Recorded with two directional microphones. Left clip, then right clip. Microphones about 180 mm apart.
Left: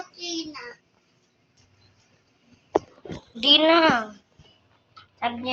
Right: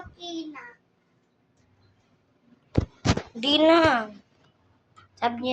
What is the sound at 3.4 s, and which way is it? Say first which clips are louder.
Speech: left 2 dB; 25° right (ahead or behind).